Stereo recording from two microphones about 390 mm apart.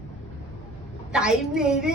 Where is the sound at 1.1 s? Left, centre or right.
Centre.